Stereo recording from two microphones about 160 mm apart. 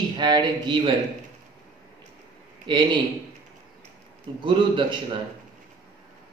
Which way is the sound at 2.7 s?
30° right (ahead or behind).